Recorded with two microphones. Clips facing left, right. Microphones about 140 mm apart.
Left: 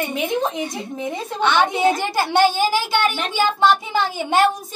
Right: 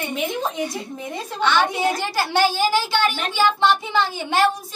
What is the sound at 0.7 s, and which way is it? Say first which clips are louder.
Speech: left 3 dB; centre (ahead or behind).